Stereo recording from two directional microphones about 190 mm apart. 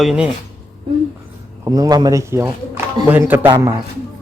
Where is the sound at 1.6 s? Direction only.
20° right (ahead or behind).